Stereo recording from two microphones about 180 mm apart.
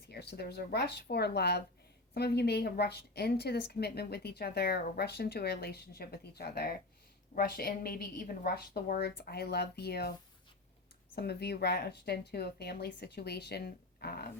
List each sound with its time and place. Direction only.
0.1 s a woman's voice: 65° left (ahead or behind)
11.1 s a woman's voice: 65° left (ahead or behind)